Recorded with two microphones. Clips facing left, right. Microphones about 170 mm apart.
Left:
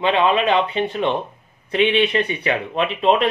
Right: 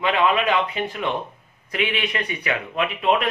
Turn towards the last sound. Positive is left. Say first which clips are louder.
# left 4 dB
turn(degrees=30)  # may be behind; listen again after turning